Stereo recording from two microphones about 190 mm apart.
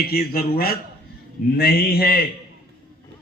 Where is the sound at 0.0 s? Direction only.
50° left (ahead or behind).